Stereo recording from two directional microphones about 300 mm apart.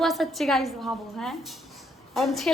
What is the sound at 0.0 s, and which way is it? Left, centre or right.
A woman's voice, centre.